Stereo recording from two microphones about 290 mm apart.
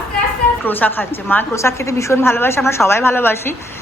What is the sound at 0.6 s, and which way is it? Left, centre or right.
A woman's voice, centre.